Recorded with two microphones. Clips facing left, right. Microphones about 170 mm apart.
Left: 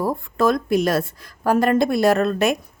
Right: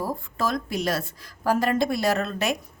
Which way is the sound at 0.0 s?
60° left (ahead or behind).